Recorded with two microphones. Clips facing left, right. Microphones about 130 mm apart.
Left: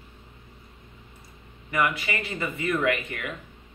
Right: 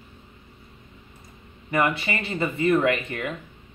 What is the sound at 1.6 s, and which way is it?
Speech, 30° right (ahead or behind).